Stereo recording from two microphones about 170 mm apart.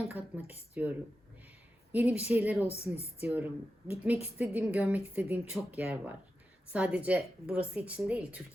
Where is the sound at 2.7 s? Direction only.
35° left (ahead or behind).